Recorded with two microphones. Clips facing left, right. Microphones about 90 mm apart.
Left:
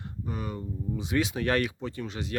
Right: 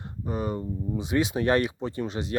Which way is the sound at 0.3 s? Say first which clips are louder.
Right 6 dB; 30° right (ahead or behind).